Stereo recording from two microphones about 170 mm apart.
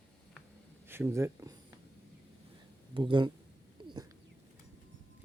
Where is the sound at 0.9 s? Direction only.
15° right (ahead or behind).